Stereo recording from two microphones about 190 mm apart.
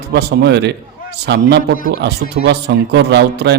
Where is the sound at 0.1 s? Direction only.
60° right (ahead or behind).